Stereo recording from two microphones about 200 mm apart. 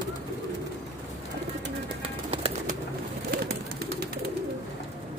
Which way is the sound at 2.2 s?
30° right (ahead or behind).